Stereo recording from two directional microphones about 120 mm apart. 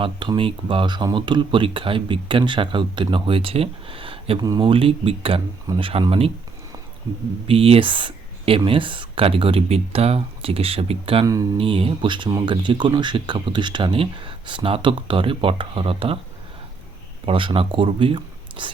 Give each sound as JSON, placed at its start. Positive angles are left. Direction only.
{"t": 0.0, "sound": "speech", "side_deg": -45}
{"t": 7.4, "sound": "speech", "side_deg": -50}
{"t": 17.2, "sound": "speech", "side_deg": -45}